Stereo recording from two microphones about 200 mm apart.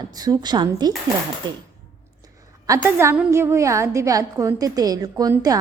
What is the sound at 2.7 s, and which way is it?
A woman's voice, 10° right (ahead or behind).